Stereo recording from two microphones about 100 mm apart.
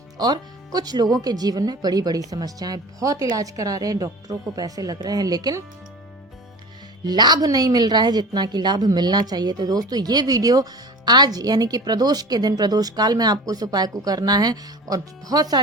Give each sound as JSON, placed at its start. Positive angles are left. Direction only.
{"t": 0.2, "sound": "a woman's voice", "side_deg": -40}
{"t": 7.0, "sound": "a woman's voice", "side_deg": -45}